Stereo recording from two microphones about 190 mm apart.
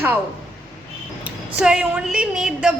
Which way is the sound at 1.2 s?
5° right (ahead or behind).